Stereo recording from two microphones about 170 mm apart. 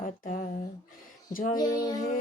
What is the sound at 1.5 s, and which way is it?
Child singing, 25° left (ahead or behind).